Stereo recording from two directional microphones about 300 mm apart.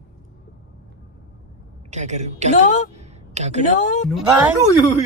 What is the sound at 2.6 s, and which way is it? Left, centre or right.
Speech, left.